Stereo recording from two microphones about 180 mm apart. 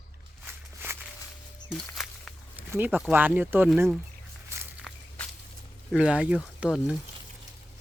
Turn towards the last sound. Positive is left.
turn(degrees=-5)  # may be behind; listen again after turning